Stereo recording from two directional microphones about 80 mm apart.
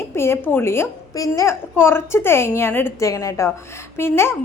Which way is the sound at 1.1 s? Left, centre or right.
Left.